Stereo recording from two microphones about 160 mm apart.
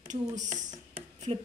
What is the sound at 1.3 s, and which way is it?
Speech, 35° right (ahead or behind).